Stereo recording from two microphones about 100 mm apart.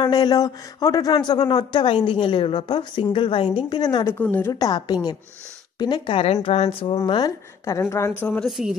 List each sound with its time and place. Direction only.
0.0 s speech: 40° left (ahead or behind)
4.2 s a woman's voice: 20° left (ahead or behind)
4.5 s a woman's voice: 40° left (ahead or behind)
6.1 s a woman's voice: 80° left; by 7.0 s 65° left (ahead or behind)
7.1 s speech: 45° left (ahead or behind)
7.6 s a woman's voice: 30° left (ahead or behind)
8.2 s speech: 15° left (ahead or behind)
8.5 s speech: 5° right (ahead or behind)